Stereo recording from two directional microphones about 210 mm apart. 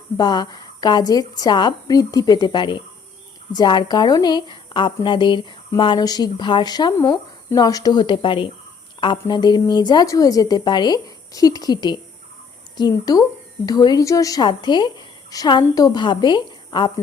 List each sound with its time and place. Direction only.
0.2 s a woman's voice: 20° left (ahead or behind)